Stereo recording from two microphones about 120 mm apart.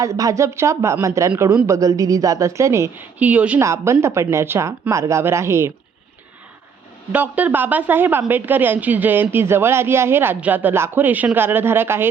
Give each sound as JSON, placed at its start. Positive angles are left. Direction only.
{"t": 0.0, "sound": "speech", "side_deg": -25}
{"t": 3.2, "sound": "speech", "side_deg": -10}
{"t": 3.6, "sound": "speech", "side_deg": -25}
{"t": 7.1, "sound": "speech", "side_deg": -15}